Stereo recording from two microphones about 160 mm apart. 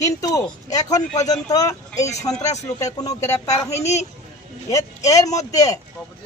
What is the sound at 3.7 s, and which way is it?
Speech, 45° left (ahead or behind).